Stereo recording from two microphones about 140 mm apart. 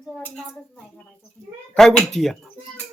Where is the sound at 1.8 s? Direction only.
Centre (ahead or behind).